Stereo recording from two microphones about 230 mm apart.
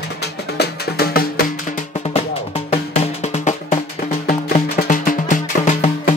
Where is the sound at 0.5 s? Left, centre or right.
Left.